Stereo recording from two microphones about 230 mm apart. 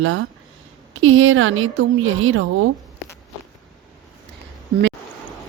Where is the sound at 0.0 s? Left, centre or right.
Right.